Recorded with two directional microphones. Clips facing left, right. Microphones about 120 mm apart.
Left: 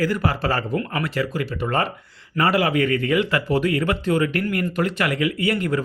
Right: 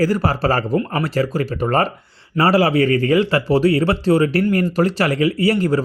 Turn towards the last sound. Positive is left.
turn(degrees=-35)  # may be behind; listen again after turning